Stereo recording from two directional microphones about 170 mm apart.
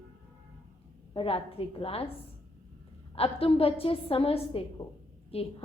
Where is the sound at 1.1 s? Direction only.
30° left (ahead or behind).